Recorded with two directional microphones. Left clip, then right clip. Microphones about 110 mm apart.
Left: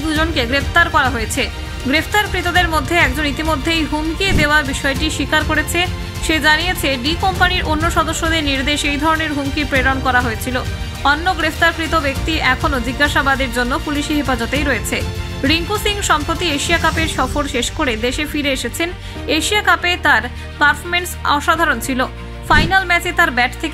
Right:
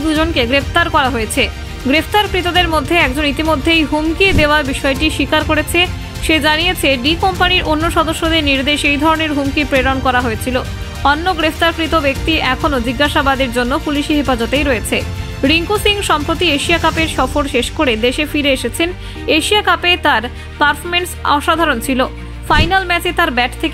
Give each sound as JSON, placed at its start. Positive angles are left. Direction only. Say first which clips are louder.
{"t": 0.1, "sound": "a woman's voice", "louder": "right 3 dB", "side_deg": -40}